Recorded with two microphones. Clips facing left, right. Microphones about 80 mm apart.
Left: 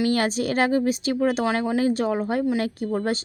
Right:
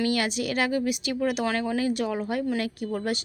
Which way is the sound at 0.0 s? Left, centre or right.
Left.